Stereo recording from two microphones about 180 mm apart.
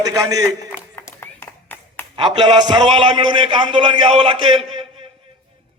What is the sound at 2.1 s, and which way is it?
A man's voice, 25° right (ahead or behind).